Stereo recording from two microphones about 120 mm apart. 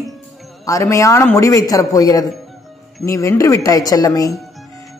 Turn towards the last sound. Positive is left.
turn(degrees=30)  # may be behind; listen again after turning